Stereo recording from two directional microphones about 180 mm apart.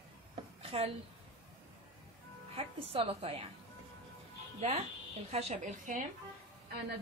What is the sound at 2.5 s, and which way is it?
Speech, 30° right (ahead or behind).